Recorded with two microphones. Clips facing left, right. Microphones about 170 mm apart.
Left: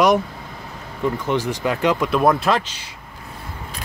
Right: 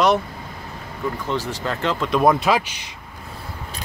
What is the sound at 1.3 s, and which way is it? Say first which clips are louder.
Speech: left 4 dB; 15° left (ahead or behind).